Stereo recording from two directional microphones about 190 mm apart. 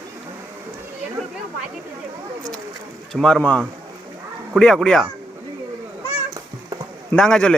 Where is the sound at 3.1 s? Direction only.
5° left (ahead or behind).